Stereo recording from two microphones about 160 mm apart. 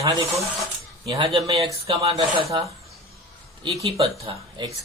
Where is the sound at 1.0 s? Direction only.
35° right (ahead or behind).